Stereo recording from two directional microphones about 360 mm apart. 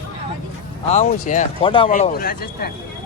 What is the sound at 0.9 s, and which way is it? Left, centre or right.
Speech, centre.